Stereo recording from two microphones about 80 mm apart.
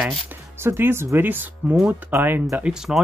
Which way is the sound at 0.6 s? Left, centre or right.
Right.